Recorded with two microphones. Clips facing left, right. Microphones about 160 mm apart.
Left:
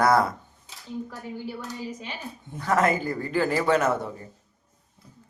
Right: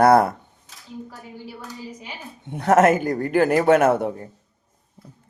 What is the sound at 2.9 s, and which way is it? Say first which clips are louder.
A man's voice: right 6 dB; 60° right (ahead or behind).